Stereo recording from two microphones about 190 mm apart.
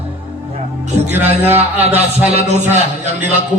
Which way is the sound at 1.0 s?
10° right (ahead or behind).